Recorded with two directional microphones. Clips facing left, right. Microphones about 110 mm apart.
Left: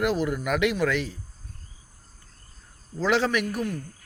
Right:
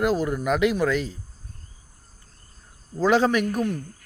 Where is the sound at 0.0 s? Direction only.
25° right (ahead or behind).